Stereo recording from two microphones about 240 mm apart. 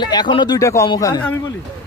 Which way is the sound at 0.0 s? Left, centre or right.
Centre.